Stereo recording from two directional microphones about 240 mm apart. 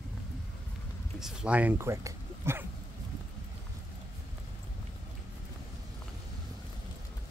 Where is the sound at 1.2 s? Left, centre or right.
Centre.